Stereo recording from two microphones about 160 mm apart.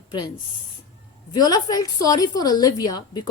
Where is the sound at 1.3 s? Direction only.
25° left (ahead or behind).